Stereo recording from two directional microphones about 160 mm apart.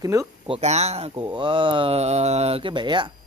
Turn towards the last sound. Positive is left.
turn(degrees=-30)  # may be behind; listen again after turning